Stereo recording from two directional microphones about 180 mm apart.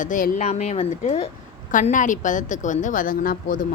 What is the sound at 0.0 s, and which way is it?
A woman's voice, 45° left (ahead or behind).